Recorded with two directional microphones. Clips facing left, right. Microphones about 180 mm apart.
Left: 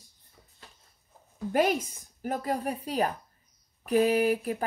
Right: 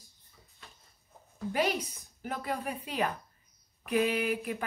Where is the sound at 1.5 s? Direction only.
45° left (ahead or behind).